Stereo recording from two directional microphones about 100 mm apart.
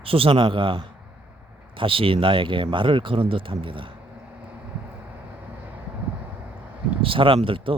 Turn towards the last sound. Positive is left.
turn(degrees=-60)  # may be behind; listen again after turning